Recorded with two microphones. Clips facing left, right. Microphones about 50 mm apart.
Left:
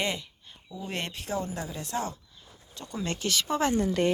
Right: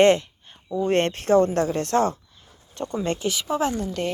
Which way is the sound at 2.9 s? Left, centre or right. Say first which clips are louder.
Right 6 dB; right.